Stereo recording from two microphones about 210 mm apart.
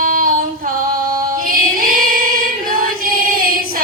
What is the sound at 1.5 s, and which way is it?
Singing, 40° right (ahead or behind).